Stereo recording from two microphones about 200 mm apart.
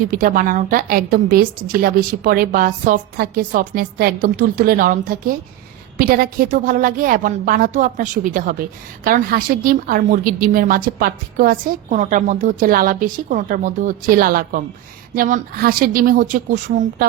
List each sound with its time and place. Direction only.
0.2 s a woman's voice: 45° right (ahead or behind)